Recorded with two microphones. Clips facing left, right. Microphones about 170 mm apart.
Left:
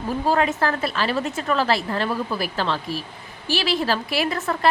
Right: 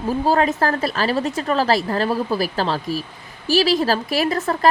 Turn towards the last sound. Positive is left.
turn(degrees=-40)  # may be behind; listen again after turning